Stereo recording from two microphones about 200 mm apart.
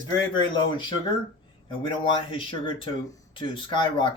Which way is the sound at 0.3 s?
25° left (ahead or behind).